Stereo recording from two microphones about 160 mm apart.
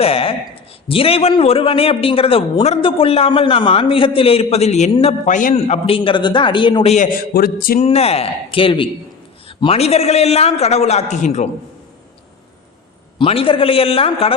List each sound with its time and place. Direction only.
0.0 s a man's voice: 35° left (ahead or behind); by 5.5 s 55° left (ahead or behind)
5.6 s a man's voice: 40° left (ahead or behind)
7.3 s music: 70° left (ahead or behind)
7.8 s a man's voice: 40° left (ahead or behind)
13.1 s a man's voice: 35° left (ahead or behind)